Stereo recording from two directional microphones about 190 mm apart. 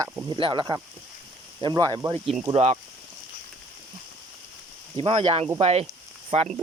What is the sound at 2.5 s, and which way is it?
Speech, 35° right (ahead or behind).